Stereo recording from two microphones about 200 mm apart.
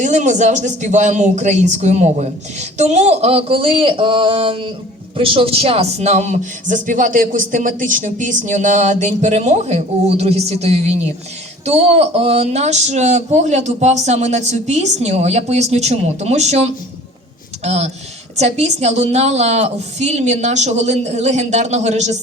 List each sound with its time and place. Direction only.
0.0 s speech: 35° right (ahead or behind)